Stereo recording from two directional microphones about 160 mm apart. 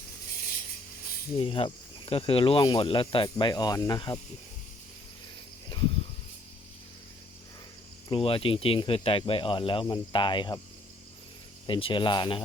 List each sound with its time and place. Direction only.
1.4 s speech: 35° left (ahead or behind)
8.1 s speech: 35° left (ahead or behind)
11.6 s speech: 30° left (ahead or behind)